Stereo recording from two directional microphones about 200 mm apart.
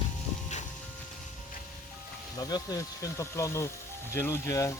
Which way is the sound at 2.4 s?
20° left (ahead or behind).